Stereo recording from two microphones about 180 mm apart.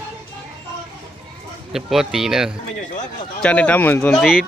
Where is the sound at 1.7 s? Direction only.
Centre (ahead or behind).